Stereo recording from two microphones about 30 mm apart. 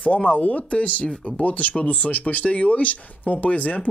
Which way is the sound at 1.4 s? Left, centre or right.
Left.